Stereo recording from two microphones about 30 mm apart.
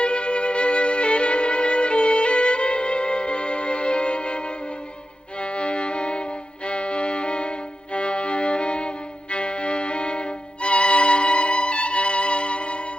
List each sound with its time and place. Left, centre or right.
0.0 s music: left